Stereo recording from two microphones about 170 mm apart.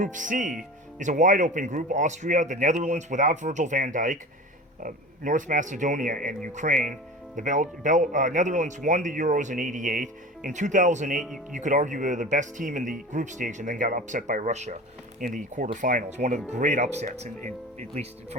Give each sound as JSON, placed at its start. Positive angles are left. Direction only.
{"t": 0.0, "sound": "speech", "side_deg": -50}